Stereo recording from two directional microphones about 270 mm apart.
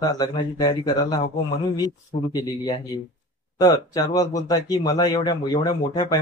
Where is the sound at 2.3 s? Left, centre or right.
Centre.